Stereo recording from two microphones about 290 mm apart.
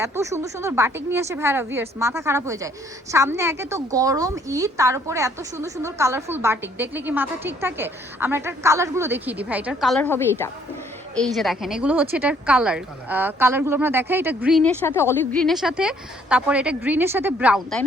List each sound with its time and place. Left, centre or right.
0.0 s speech: centre